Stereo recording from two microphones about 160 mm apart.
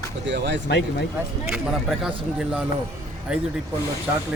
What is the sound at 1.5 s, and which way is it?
Speech, 5° right (ahead or behind).